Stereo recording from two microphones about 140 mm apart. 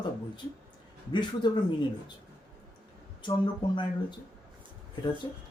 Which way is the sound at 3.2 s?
30° left (ahead or behind).